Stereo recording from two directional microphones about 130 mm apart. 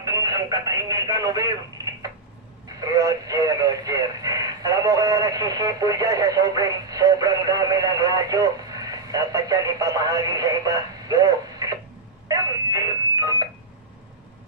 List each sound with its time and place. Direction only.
0.0 s speech: 30° right (ahead or behind)
2.8 s speech: 30° right (ahead or behind)
12.3 s a sound: 30° right (ahead or behind)